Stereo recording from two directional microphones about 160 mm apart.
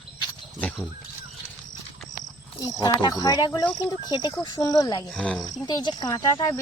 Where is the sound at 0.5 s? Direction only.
5° left (ahead or behind).